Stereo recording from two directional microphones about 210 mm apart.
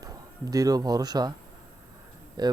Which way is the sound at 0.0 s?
15° right (ahead or behind).